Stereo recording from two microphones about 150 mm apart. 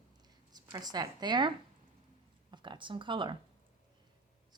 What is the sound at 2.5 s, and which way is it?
Speech, 30° right (ahead or behind).